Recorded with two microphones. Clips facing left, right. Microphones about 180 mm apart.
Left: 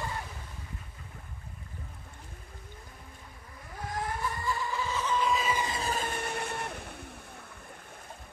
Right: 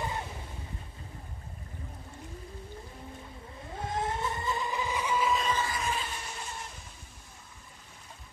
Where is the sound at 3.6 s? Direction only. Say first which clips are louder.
Right 2 dB; 25° right (ahead or behind); by 5.5 s centre (ahead or behind).